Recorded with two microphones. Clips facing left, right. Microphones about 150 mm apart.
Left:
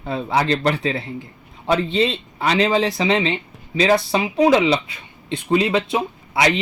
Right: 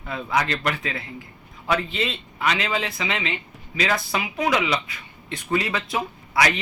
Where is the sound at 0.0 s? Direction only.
30° left (ahead or behind).